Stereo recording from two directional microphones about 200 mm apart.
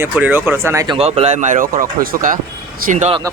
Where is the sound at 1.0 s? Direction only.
30° right (ahead or behind).